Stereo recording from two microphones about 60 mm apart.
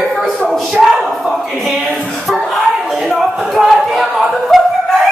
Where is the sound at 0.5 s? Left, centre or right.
Centre.